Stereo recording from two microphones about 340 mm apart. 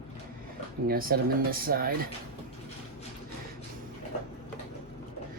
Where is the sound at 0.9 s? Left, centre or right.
Right.